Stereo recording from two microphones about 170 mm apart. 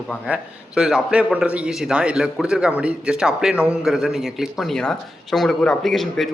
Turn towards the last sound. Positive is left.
turn(degrees=0)  # may be behind; listen again after turning